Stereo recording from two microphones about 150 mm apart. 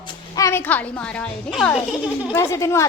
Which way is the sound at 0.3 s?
20° left (ahead or behind).